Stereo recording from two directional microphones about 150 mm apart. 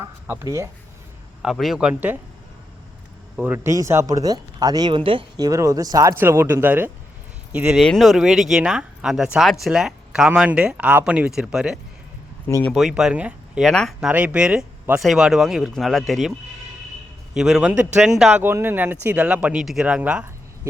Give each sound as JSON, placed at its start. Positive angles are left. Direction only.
{"t": 0.0, "sound": "speech", "side_deg": -20}
{"t": 1.4, "sound": "speech", "side_deg": 0}
{"t": 3.3, "sound": "speech", "side_deg": -10}
{"t": 5.4, "sound": "speech", "side_deg": -20}
{"t": 7.5, "sound": "speech", "side_deg": 0}
{"t": 17.3, "sound": "speech", "side_deg": -5}
{"t": 18.4, "sound": "speech", "side_deg": -15}